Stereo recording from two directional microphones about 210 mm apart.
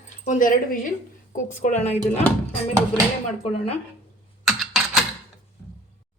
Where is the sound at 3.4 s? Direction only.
30° left (ahead or behind).